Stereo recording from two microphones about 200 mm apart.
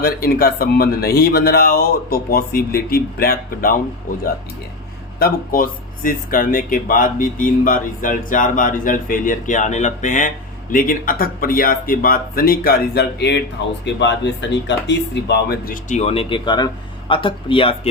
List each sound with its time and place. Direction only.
0.0 s speech: 50° left (ahead or behind); by 17.7 s 25° left (ahead or behind)